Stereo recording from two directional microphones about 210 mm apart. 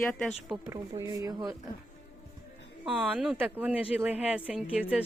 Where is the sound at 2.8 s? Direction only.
5° right (ahead or behind).